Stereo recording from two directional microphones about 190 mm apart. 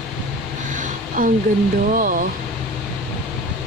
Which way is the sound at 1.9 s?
45° right (ahead or behind).